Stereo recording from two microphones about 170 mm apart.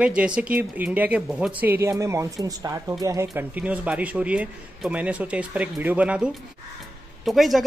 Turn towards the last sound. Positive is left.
turn(degrees=0)  # may be behind; listen again after turning